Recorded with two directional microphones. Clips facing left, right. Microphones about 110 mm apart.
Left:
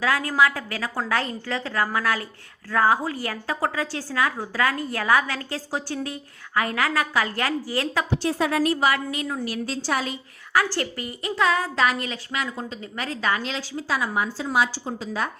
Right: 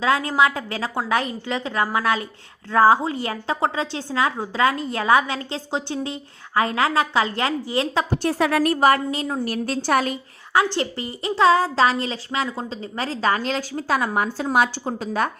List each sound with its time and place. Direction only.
0.0 s a woman's voice: 25° right (ahead or behind)
8.1 s a woman's voice: 60° right (ahead or behind)
9.0 s a woman's voice: 30° right (ahead or behind)
9.4 s a woman's voice: 55° right (ahead or behind)
10.5 s a woman's voice: 25° right (ahead or behind); by 15.3 s 55° right (ahead or behind)